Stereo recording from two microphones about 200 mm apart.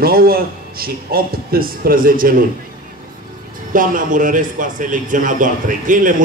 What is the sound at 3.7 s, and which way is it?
A man's voice, 40° right (ahead or behind).